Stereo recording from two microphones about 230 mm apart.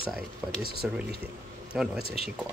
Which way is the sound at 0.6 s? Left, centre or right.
Right.